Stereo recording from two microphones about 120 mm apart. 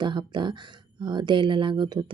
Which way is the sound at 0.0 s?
40° right (ahead or behind).